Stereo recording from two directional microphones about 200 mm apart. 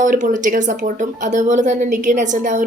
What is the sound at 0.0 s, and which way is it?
A woman's voice, 40° right (ahead or behind).